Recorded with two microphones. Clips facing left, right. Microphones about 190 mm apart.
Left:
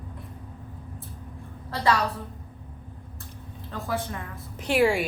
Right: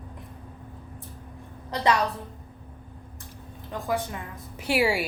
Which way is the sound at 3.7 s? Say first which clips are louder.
Right 2 dB; 15° right (ahead or behind).